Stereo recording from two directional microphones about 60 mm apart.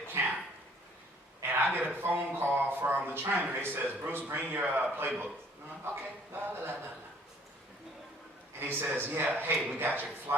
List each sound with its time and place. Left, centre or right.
0.1 s dog: right
1.4 s a sound: right
2.0 s speech: right
8.5 s speech: right